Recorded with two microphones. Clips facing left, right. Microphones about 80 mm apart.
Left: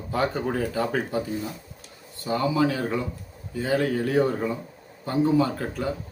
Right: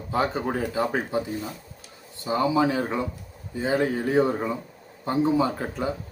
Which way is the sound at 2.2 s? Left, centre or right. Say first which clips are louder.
Right 1 dB; right.